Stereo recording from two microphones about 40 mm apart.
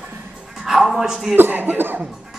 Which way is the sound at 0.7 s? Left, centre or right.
Centre.